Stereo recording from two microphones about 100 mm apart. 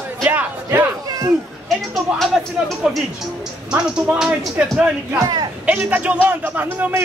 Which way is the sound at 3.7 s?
10° right (ahead or behind).